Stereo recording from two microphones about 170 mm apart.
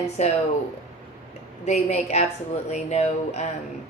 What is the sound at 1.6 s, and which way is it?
Speech, 40° left (ahead or behind).